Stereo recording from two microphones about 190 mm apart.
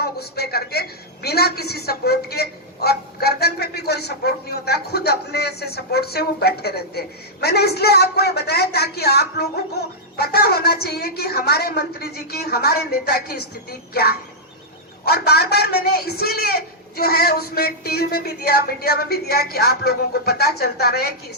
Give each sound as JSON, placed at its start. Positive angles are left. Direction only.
{"t": 0.0, "sound": "a woman's voice", "side_deg": 55}